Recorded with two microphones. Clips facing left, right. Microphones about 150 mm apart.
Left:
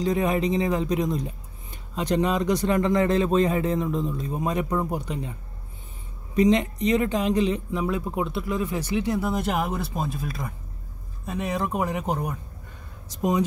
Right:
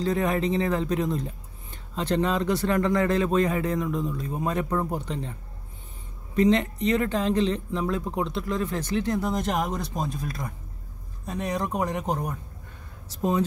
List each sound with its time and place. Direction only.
0.0 s speech: 15° left (ahead or behind)
6.3 s speech: 15° left (ahead or behind)